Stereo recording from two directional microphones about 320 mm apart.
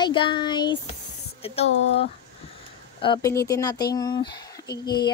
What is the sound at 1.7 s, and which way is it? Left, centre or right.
Speech, left.